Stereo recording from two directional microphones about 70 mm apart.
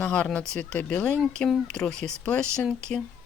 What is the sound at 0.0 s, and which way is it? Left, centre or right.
Speech, centre.